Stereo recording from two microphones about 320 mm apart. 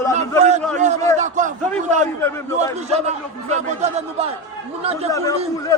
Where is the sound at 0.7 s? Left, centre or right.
Right.